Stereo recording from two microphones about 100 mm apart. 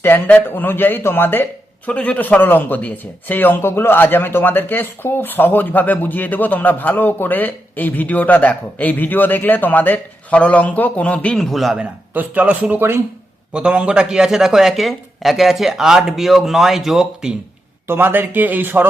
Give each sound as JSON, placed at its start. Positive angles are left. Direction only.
{"t": 0.0, "sound": "speech", "side_deg": 20}
{"t": 11.3, "sound": "speech", "side_deg": 0}
{"t": 11.8, "sound": "speech", "side_deg": -15}
{"t": 17.8, "sound": "speech", "side_deg": -20}